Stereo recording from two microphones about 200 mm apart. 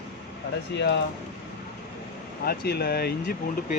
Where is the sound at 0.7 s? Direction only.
60° left (ahead or behind).